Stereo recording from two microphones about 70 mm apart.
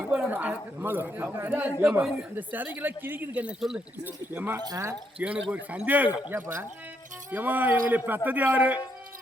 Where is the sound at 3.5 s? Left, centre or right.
Centre.